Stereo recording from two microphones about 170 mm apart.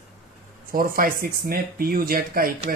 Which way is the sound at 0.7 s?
55° right (ahead or behind).